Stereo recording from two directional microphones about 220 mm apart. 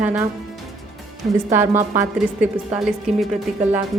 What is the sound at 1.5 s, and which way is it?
A woman's voice, 10° right (ahead or behind).